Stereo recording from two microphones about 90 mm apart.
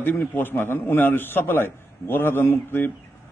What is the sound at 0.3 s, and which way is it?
A man's voice, 25° left (ahead or behind).